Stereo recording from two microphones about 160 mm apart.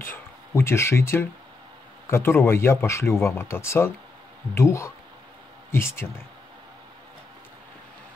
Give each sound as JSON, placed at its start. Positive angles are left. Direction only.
{"t": 0.1, "sound": "speech", "side_deg": 15}